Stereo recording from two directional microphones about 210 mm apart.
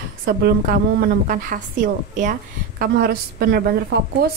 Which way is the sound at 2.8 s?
45° right (ahead or behind).